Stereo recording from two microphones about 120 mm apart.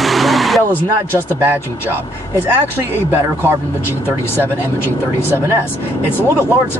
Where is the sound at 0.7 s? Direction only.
15° left (ahead or behind).